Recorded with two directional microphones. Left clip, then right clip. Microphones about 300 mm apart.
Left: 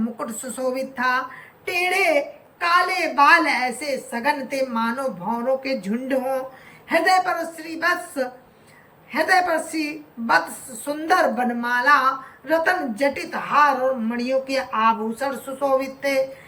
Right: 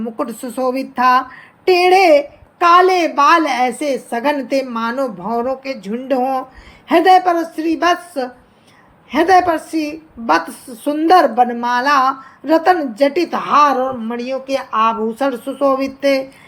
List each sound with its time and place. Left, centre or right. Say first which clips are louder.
0.2 s a woman's voice: right 7 dB; centre
10.8 s a woman's voice: right 8 dB; centre